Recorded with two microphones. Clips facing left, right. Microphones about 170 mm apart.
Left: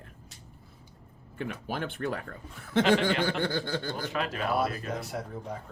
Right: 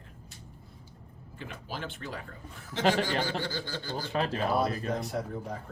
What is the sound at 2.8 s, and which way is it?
Speech, 40° right (ahead or behind).